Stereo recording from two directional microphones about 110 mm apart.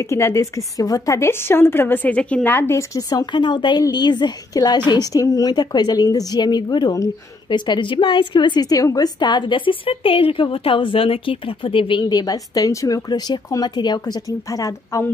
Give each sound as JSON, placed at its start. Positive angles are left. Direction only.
{"t": 0.0, "sound": "a woman's voice", "side_deg": 25}